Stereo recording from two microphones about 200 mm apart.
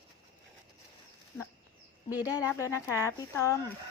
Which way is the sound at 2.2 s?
15° left (ahead or behind).